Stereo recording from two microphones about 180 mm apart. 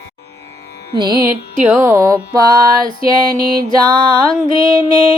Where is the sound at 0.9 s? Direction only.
25° right (ahead or behind).